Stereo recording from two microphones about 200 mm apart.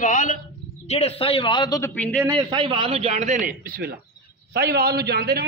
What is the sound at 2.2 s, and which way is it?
A man's voice, 25° right (ahead or behind).